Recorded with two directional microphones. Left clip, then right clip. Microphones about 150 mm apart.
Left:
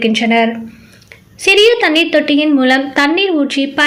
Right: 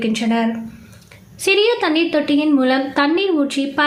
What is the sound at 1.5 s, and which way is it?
A woman's voice, 15° left (ahead or behind).